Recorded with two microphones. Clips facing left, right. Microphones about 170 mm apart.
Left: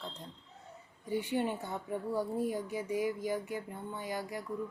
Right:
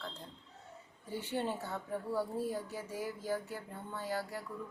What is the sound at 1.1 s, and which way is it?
Speech, 15° left (ahead or behind).